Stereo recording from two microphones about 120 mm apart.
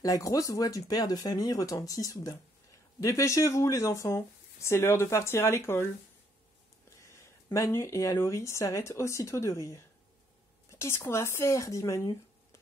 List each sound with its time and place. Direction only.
0.0 s speech: 30° left (ahead or behind)
7.0 s speech: 25° left (ahead or behind)